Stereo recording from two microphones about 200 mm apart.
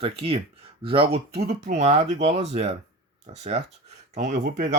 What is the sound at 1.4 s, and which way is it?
Speech, 50° right (ahead or behind).